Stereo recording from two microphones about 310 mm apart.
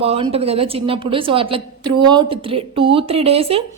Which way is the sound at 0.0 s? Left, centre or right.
Centre.